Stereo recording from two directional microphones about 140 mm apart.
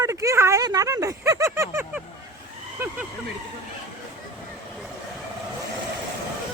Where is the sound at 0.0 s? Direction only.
25° right (ahead or behind).